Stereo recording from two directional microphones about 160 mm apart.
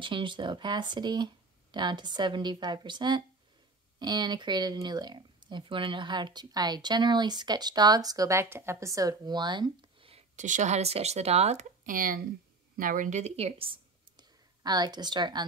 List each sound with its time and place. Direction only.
0.0 s speech: 30° right (ahead or behind)
10.3 s speech: 50° right (ahead or behind); by 15.4 s 30° right (ahead or behind)